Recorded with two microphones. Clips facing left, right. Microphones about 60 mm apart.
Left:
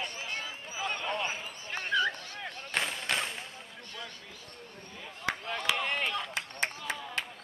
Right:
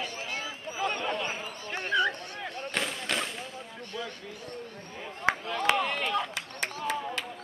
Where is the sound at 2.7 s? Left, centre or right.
Centre.